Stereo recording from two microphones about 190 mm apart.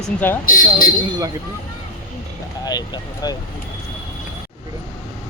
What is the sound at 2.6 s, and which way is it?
Speech, 20° left (ahead or behind).